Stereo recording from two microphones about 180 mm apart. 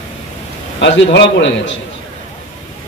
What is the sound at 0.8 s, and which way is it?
Speech, 75° left (ahead or behind).